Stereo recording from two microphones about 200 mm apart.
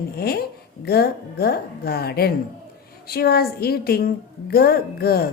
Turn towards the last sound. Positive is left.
turn(degrees=50)  # may be behind; listen again after turning